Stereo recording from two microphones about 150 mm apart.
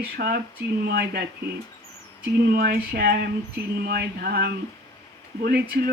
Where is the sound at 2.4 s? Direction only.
90° right.